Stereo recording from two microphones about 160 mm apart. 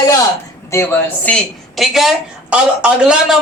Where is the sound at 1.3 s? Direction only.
Centre (ahead or behind).